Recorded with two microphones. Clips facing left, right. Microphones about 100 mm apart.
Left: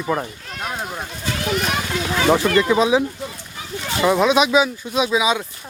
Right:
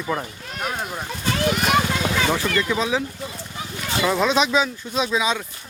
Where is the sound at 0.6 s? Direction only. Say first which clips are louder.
Even; centre (ahead or behind).